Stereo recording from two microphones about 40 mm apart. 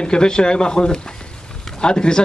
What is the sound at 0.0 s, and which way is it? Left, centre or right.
Speech, left.